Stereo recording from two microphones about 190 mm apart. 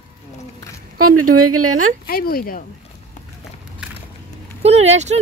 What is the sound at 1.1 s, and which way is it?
Speech, 45° right (ahead or behind).